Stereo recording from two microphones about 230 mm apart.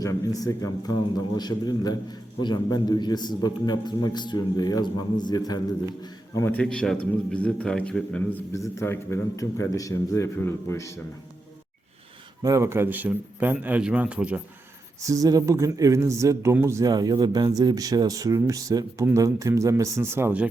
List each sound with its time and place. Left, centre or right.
0.0 s a man's voice: centre
12.4 s a man's voice: centre